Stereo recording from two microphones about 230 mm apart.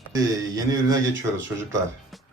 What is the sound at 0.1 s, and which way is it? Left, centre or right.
Speech, centre.